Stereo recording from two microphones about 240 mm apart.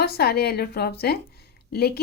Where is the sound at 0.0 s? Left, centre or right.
Left.